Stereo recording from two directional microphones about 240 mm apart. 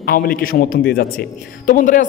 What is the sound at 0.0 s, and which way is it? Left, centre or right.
A man's voice, left.